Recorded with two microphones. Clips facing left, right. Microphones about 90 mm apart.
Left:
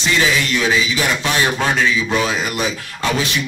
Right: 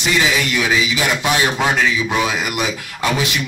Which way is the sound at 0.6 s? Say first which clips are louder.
Even; 15° right (ahead or behind).